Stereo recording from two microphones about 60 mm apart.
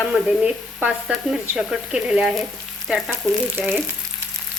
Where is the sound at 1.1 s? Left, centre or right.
Centre.